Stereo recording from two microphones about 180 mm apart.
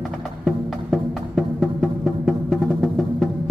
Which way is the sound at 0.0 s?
Centre (ahead or behind).